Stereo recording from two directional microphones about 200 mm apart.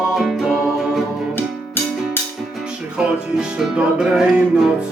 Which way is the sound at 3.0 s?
5° right (ahead or behind).